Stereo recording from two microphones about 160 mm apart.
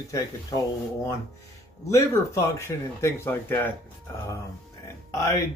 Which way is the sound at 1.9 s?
20° left (ahead or behind).